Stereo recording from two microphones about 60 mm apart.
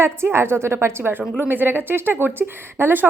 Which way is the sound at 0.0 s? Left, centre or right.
Right.